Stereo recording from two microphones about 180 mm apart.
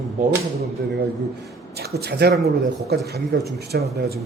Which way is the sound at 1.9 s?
60° right (ahead or behind).